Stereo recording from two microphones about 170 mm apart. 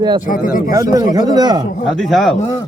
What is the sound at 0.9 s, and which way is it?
Speech, 20° right (ahead or behind).